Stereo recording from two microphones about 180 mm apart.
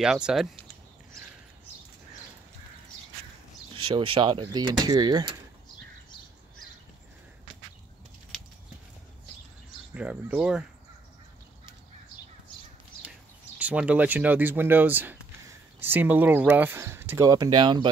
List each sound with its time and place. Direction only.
0.0 s speech: 5° right (ahead or behind)
3.7 s speech: 30° right (ahead or behind)
9.9 s speech: 5° right (ahead or behind)
13.6 s speech: 5° right (ahead or behind); by 17.8 s 25° right (ahead or behind)